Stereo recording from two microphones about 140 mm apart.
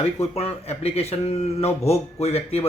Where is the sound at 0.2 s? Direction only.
50° left (ahead or behind).